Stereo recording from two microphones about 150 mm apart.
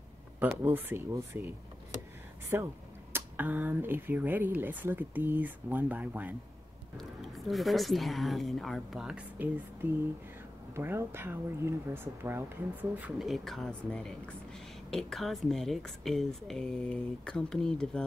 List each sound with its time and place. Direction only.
0.6 s speech: 15° right (ahead or behind)
2.5 s speech: 15° right (ahead or behind)
7.0 s speech: centre (ahead or behind)
13.2 s speech: centre (ahead or behind)